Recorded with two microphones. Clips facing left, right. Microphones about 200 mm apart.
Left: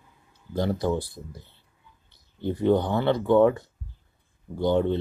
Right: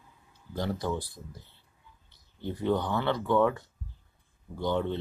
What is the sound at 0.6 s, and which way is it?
Speech, 20° left (ahead or behind).